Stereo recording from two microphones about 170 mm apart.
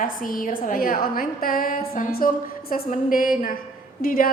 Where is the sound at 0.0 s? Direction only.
55° left (ahead or behind).